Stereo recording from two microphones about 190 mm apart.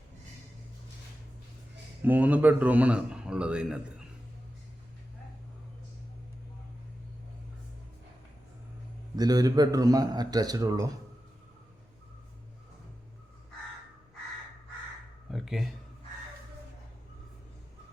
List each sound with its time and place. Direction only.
2.0 s a man's voice: 10° right (ahead or behind)
9.1 s a man's voice: 20° right (ahead or behind)
15.3 s speech: centre (ahead or behind)